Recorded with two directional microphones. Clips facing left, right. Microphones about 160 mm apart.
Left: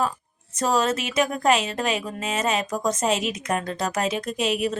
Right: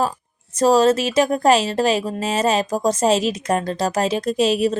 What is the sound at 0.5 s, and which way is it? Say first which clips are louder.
Speech: right 8 dB; 35° right (ahead or behind).